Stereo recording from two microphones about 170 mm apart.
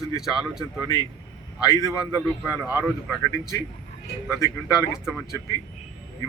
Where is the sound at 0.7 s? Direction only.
20° left (ahead or behind).